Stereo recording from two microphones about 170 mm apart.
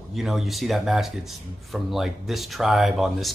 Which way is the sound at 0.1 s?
Centre (ahead or behind).